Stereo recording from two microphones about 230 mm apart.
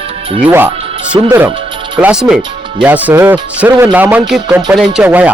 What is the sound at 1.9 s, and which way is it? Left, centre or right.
Speech, centre.